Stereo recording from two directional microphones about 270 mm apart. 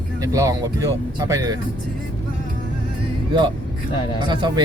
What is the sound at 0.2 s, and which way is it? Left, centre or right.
Speech, centre.